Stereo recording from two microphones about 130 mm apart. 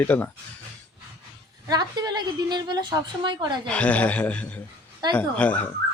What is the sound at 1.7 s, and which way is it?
A woman's voice, 30° right (ahead or behind).